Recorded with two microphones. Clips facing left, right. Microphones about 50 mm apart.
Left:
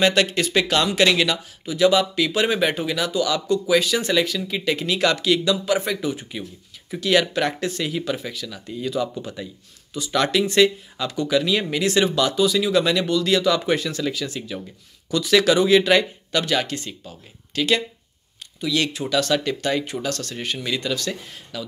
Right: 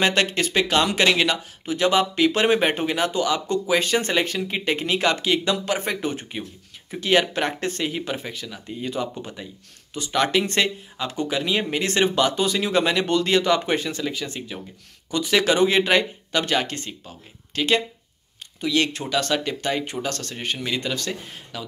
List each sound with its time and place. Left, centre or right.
0.0 s speech: right
1.3 s speech: right
6.9 s speech: right
10.4 s speech: right
20.3 s speech: centre